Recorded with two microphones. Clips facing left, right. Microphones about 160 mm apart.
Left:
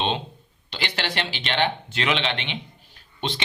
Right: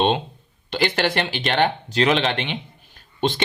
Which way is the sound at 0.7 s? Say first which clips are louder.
Right 8 dB; 50° right (ahead or behind).